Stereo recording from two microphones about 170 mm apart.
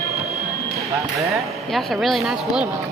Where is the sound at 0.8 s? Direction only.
20° right (ahead or behind).